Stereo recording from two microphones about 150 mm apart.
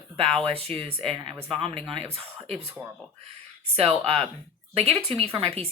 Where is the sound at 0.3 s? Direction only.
5° left (ahead or behind).